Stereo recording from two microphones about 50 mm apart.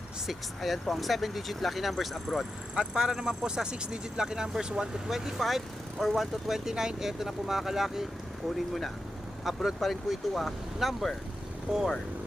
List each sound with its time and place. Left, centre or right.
0.3 s speech: centre
2.7 s speech: centre
8.5 s speech: centre
11.7 s speech: centre